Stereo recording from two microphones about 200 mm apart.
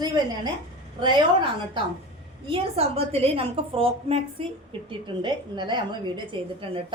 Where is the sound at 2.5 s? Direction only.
30° right (ahead or behind).